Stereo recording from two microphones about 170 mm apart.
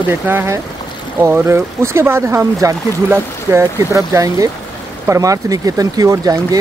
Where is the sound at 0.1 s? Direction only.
15° right (ahead or behind).